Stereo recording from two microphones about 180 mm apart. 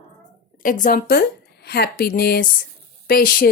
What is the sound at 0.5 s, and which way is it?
A woman's voice, 50° left (ahead or behind).